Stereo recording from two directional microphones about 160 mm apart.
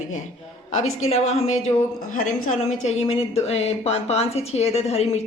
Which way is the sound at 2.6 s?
40° left (ahead or behind).